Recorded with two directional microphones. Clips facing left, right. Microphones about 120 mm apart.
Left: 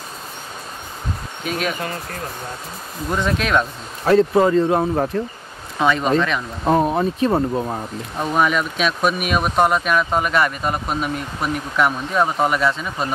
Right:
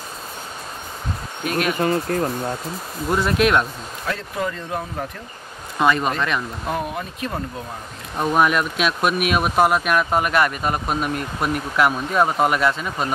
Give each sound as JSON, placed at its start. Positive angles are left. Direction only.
{"t": 1.4, "sound": "speech", "side_deg": 0}
{"t": 3.1, "sound": "speech", "side_deg": -5}
{"t": 4.0, "sound": "speech", "side_deg": 35}
{"t": 5.8, "sound": "speech", "side_deg": 0}
{"t": 6.6, "sound": "speech", "side_deg": 35}
{"t": 8.2, "sound": "speech", "side_deg": -5}